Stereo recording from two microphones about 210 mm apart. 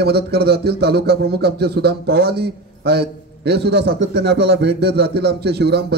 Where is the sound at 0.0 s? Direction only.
50° right (ahead or behind).